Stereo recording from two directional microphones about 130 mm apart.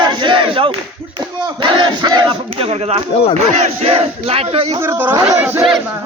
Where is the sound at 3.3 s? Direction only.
55° right (ahead or behind).